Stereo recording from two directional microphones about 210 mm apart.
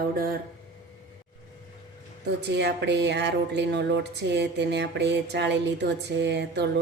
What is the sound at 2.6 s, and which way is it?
Speech, 55° right (ahead or behind).